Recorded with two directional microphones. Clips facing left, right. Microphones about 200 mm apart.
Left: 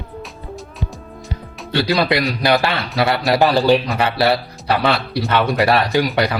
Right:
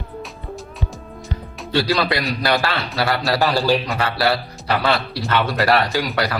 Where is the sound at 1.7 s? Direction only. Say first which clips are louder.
Left 2 dB; 20° left (ahead or behind).